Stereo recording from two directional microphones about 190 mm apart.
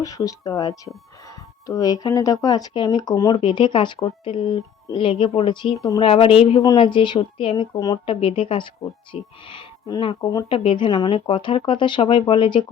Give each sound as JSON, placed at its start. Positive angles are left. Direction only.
{"t": 0.0, "sound": "speech", "side_deg": 20}